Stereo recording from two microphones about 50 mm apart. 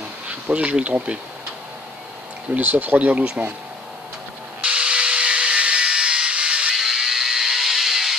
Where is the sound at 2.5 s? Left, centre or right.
Right.